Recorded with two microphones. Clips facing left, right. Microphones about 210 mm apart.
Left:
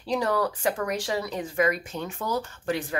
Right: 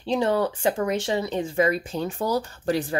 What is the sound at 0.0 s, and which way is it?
Speech, 25° right (ahead or behind).